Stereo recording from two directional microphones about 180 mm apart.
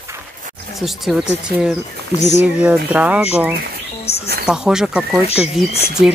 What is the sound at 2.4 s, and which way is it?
Speech, 5° right (ahead or behind).